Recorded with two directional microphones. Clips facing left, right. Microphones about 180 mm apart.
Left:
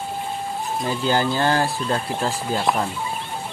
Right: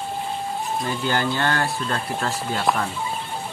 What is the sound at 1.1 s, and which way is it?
Speech, 35° left (ahead or behind).